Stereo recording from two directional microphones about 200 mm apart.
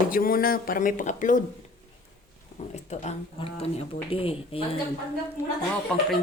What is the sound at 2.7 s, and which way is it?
Speech, 35° left (ahead or behind).